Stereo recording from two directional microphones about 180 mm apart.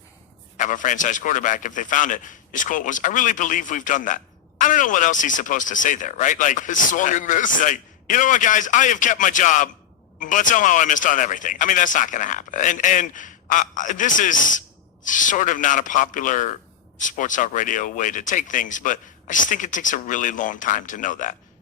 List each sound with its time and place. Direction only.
0.5 s a man's voice: 45° left (ahead or behind)